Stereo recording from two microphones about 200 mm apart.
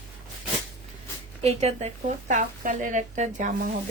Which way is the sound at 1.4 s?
30° right (ahead or behind).